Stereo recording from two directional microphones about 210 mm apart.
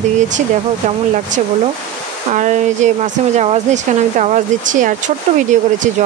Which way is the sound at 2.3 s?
35° right (ahead or behind).